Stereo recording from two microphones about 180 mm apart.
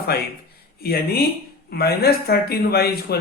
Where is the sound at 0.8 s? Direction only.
60° left (ahead or behind).